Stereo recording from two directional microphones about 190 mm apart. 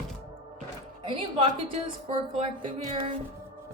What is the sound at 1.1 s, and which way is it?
A woman's voice, 25° right (ahead or behind).